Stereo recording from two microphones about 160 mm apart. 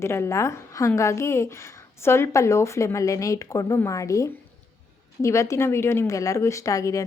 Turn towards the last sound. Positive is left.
turn(degrees=20)  # may be behind; listen again after turning